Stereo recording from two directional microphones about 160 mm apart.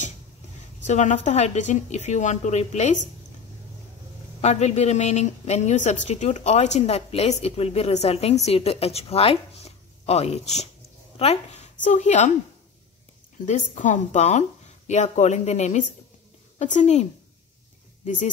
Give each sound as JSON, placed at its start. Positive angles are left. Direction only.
{"t": 0.8, "sound": "a woman's voice", "side_deg": 45}
{"t": 4.4, "sound": "a woman's voice", "side_deg": 45}
{"t": 13.5, "sound": "a woman's voice", "side_deg": 50}